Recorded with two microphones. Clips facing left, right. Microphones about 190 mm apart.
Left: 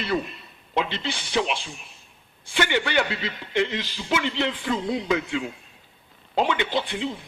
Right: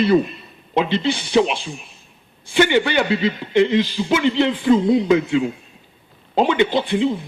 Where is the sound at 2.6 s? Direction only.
25° right (ahead or behind).